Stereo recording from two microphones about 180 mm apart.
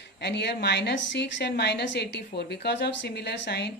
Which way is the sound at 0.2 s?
65° left (ahead or behind).